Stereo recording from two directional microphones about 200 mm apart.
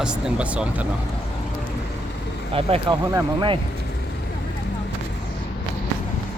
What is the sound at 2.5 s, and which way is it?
Speech, 25° right (ahead or behind).